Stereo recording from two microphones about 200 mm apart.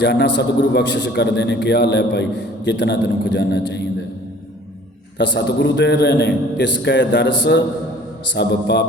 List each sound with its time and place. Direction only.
0.0 s a man's voice: 60° left (ahead or behind)
5.1 s a man's voice: 60° left (ahead or behind)